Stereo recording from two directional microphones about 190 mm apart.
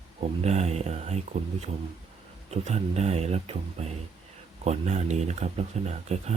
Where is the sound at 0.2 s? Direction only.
35° right (ahead or behind).